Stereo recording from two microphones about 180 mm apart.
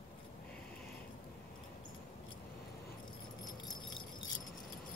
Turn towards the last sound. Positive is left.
turn(degrees=20)  # may be behind; listen again after turning